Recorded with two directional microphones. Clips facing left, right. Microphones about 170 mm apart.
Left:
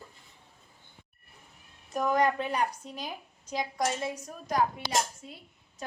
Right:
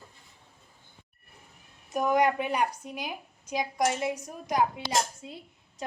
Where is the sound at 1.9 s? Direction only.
10° right (ahead or behind).